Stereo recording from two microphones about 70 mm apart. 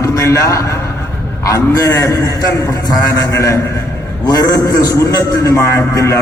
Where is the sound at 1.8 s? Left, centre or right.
Left.